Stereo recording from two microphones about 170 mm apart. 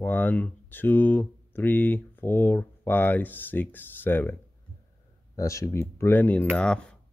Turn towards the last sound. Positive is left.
turn(degrees=5)  # may be behind; listen again after turning